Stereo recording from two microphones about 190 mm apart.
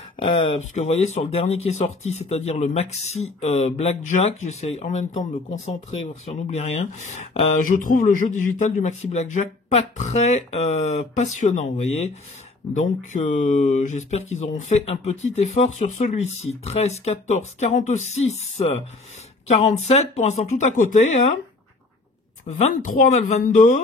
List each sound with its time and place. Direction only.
0.2 s speech: 30° left (ahead or behind)
16.3 s speech: 90° left
16.6 s speech: 35° left (ahead or behind)
22.5 s speech: 40° left (ahead or behind)